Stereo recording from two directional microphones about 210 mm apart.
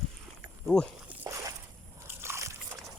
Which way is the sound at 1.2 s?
15° right (ahead or behind).